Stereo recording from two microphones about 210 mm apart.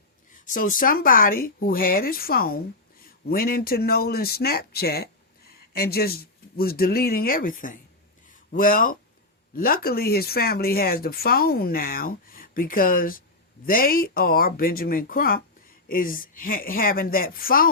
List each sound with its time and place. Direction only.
0.3 s speech: 40° left (ahead or behind)